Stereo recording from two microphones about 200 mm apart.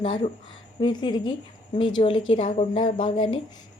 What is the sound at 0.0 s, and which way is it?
A woman's voice, 30° left (ahead or behind).